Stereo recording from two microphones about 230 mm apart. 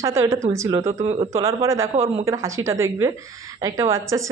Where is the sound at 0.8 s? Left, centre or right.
Right.